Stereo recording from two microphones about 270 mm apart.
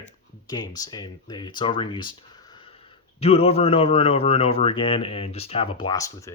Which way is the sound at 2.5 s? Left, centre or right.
Centre.